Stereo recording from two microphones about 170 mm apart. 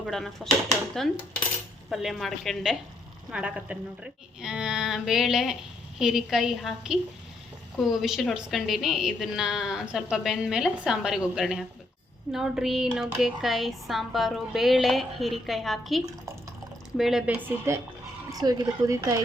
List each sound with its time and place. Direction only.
0.0 s a woman's voice: centre (ahead or behind)
18.3 s speech: 20° right (ahead or behind)